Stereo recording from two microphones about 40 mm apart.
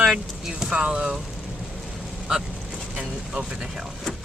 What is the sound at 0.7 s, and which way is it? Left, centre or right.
Speech, right.